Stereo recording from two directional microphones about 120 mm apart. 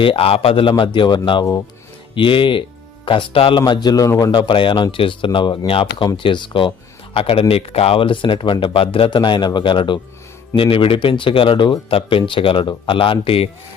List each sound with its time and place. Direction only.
0.0 s a man's voice: 50° left (ahead or behind)
3.6 s a man's voice: 35° left (ahead or behind)
4.3 s speech: 40° left (ahead or behind)